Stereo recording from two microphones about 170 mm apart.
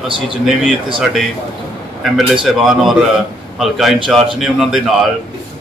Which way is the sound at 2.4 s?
Centre (ahead or behind).